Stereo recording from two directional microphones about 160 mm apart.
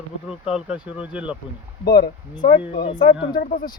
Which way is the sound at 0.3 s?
5° right (ahead or behind).